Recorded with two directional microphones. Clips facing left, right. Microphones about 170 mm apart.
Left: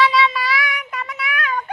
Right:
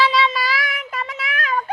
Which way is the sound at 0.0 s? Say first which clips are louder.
Left 1 dB; 30° right (ahead or behind).